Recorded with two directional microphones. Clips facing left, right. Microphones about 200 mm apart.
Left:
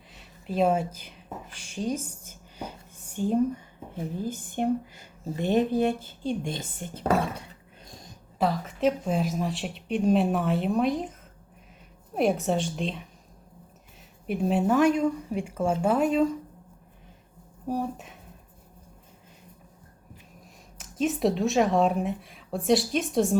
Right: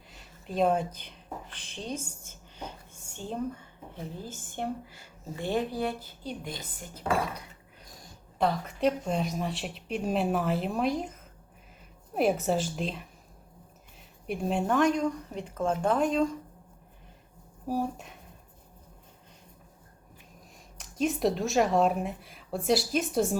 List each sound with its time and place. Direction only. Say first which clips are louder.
0.1 s a sound: left 4 dB; centre (ahead or behind)
1.6 s a woman's voice: left 8 dB; 10° left (ahead or behind)
2.2 s whispering: left 3 dB; 10° left (ahead or behind)
3.1 s speech: left 9 dB; 10° left (ahead or behind); by 7.4 s 25° left (ahead or behind)
7.9 s a sound: left 4 dB; 25° left (ahead or behind)
8.4 s speech: left 1 dB; centre (ahead or behind)
14.3 s speech: left 4 dB; centre (ahead or behind)
17.7 s speech: left 1 dB; centre (ahead or behind)
20.7 s speech: left 2 dB; centre (ahead or behind)